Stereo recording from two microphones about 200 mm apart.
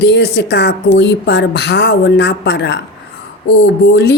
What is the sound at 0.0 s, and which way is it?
Speech, 60° left (ahead or behind).